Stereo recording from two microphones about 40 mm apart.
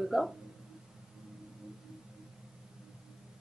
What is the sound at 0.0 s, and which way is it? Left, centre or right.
Speech, centre.